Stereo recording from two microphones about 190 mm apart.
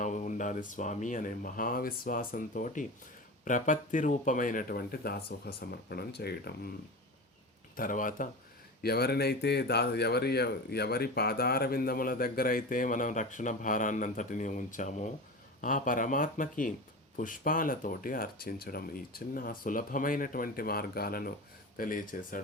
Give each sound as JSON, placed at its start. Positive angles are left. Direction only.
{"t": 0.0, "sound": "a man's voice", "side_deg": 40}
{"t": 7.8, "sound": "a man's voice", "side_deg": 45}